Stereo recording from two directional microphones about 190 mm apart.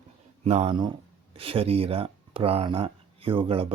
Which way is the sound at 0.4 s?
35° right (ahead or behind).